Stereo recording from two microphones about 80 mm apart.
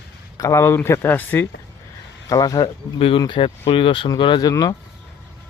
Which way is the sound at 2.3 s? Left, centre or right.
Left.